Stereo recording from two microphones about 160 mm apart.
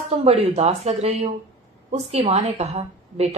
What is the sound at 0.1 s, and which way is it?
A woman's voice, 40° right (ahead or behind).